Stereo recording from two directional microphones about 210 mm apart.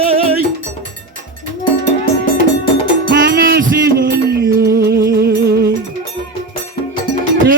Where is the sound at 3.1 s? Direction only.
45° right (ahead or behind).